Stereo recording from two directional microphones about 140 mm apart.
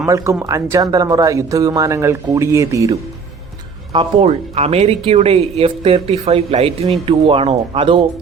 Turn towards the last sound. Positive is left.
turn(degrees=-40)  # may be behind; listen again after turning